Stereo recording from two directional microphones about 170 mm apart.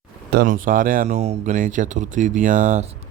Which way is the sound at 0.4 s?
50° right (ahead or behind).